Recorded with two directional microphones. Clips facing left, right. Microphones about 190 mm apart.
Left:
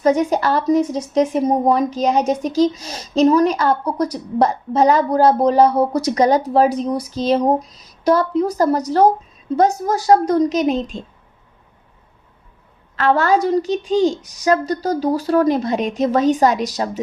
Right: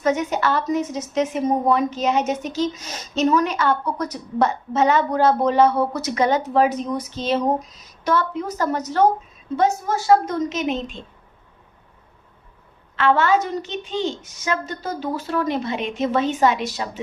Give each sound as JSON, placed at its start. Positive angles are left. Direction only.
{"t": 0.0, "sound": "speech", "side_deg": 35}
{"t": 13.0, "sound": "speech", "side_deg": 40}